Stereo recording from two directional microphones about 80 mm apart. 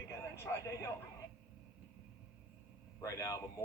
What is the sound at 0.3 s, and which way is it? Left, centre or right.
Speech, left.